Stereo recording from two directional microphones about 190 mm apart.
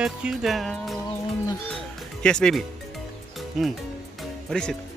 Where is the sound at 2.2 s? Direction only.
5° left (ahead or behind).